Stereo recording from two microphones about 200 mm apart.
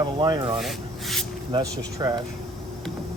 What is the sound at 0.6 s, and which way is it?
Speech, centre (ahead or behind).